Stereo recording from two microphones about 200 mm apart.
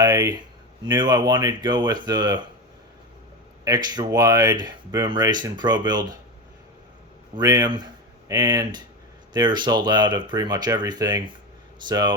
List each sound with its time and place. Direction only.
0.0 s speech: 20° right (ahead or behind)
3.6 s speech: 20° right (ahead or behind)
7.3 s speech: 20° right (ahead or behind)